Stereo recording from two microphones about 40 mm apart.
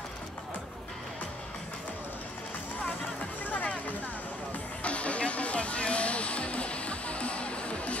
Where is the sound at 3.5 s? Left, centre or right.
Left.